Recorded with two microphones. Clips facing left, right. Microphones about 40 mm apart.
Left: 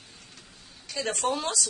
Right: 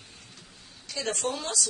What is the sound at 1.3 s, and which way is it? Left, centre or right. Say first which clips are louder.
Speech: left 3 dB; centre.